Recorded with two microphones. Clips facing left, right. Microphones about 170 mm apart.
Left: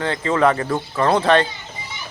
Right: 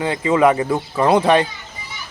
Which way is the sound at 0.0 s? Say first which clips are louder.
Right 3 dB; 10° right (ahead or behind).